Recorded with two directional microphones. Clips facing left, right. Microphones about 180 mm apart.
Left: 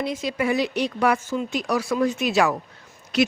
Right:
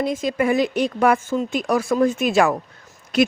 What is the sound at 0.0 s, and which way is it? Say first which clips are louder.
Speech: right 4 dB; 50° right (ahead or behind).